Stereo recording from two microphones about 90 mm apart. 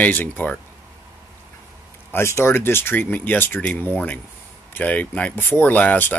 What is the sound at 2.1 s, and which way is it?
Speech, 30° left (ahead or behind).